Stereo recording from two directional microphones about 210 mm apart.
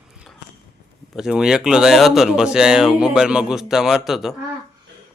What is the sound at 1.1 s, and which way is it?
Speech, 5° right (ahead or behind).